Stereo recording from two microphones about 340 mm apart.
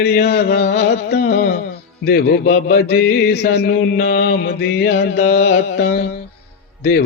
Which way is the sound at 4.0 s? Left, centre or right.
Left.